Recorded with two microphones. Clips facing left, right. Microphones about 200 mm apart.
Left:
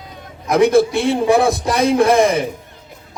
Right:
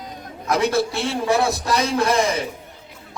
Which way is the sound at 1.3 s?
55° left (ahead or behind).